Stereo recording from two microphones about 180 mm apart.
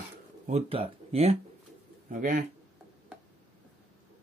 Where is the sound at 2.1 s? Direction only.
45° right (ahead or behind).